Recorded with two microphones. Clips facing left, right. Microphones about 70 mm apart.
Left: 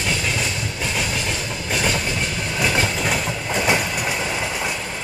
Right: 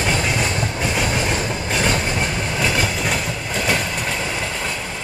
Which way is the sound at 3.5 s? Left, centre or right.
Centre.